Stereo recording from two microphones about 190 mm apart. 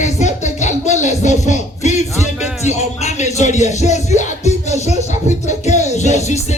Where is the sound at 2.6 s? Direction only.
35° left (ahead or behind).